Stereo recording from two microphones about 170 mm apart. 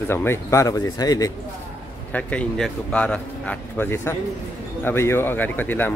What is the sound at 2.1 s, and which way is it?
Speech, 5° left (ahead or behind).